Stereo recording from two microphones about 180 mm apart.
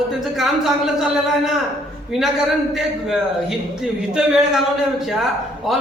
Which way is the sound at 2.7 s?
Centre (ahead or behind).